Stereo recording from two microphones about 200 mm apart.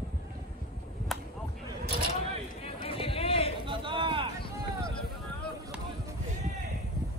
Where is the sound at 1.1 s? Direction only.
Centre (ahead or behind).